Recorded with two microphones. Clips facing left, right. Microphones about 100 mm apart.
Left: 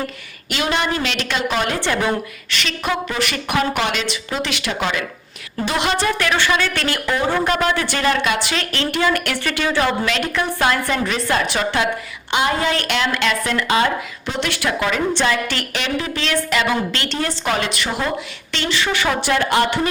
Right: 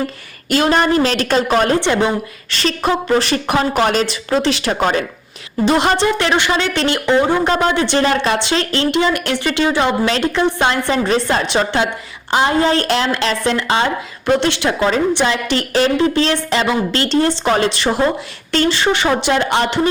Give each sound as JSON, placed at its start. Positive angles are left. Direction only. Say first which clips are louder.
{"t": 0.5, "sound": "a woman's voice", "louder": "right 7 dB", "side_deg": -40}
{"t": 1.8, "sound": "a woman's voice", "louder": "right 4 dB", "side_deg": -20}
{"t": 2.5, "sound": "a woman's voice", "louder": "right 6 dB", "side_deg": -35}
{"t": 6.1, "sound": "a woman's voice", "louder": "right 3 dB", "side_deg": -25}
{"t": 15.1, "sound": "a woman's voice", "louder": "right 3 dB", "side_deg": -20}